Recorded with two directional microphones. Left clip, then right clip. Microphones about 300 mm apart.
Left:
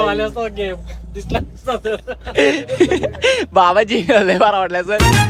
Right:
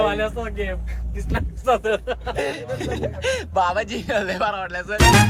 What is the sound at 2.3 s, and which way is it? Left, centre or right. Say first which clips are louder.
Speech: left 15 dB; left.